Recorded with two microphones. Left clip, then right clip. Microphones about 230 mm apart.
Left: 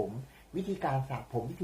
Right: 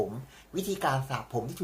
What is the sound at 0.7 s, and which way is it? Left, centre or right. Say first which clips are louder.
Speech: right 5 dB; centre.